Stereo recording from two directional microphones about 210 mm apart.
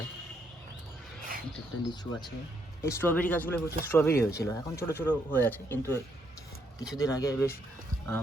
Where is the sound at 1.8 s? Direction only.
20° left (ahead or behind).